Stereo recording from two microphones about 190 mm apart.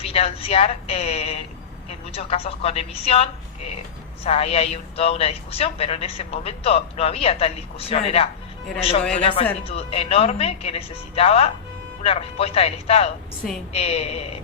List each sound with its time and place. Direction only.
0.0 s a man's voice: 30° left (ahead or behind)